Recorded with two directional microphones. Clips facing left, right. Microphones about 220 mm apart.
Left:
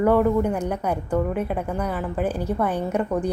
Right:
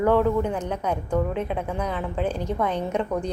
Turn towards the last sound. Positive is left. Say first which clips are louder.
# left 2 dB
turn(degrees=5)  # may be behind; listen again after turning